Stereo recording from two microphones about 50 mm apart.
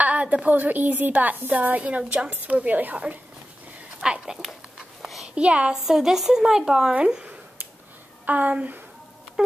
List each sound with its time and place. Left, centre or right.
0.0 s a woman's voice: right
4.0 s speech: centre
5.9 s speech: centre
8.3 s a woman's voice: right